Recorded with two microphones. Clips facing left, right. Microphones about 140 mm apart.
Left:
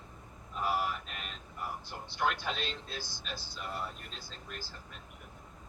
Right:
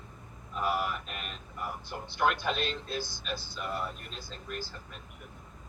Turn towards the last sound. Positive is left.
turn(degrees=-55)  # may be behind; listen again after turning